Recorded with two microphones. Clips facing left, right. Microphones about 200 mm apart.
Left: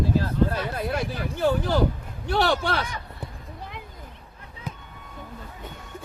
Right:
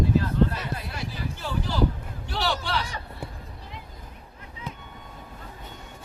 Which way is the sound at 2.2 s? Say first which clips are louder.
Left 6 dB; 55° left (ahead or behind).